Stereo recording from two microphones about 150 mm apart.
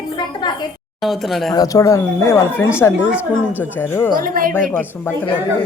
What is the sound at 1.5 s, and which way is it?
Speech, 20° left (ahead or behind).